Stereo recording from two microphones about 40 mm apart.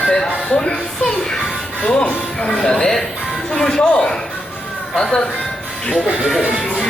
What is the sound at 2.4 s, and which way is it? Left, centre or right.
Speech, centre.